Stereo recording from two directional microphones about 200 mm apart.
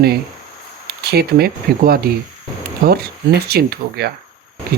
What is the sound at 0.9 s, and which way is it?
Speech, 50° right (ahead or behind).